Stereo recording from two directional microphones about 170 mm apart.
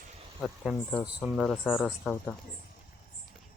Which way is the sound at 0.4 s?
Centre (ahead or behind).